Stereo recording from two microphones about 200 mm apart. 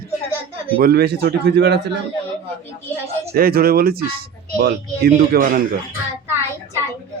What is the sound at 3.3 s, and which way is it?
Speech, 45° right (ahead or behind).